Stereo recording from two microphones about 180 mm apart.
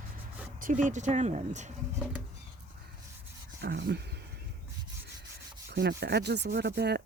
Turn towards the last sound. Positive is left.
turn(degrees=-65)  # may be behind; listen again after turning